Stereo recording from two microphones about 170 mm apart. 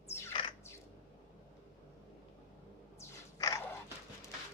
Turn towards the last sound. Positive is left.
turn(degrees=20)  # may be behind; listen again after turning